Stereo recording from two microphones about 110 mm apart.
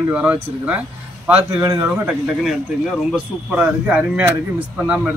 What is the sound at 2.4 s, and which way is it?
Speech, 5° right (ahead or behind).